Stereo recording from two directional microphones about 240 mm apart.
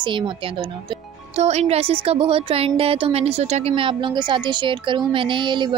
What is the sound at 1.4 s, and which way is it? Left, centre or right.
A woman's voice, right.